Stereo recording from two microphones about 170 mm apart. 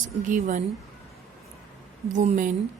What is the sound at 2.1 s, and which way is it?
Speech, 45° right (ahead or behind).